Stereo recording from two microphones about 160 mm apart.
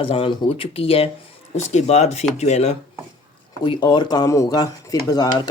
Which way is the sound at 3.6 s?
25° left (ahead or behind).